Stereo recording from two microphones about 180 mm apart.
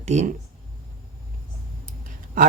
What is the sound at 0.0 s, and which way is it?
Speech, 40° right (ahead or behind).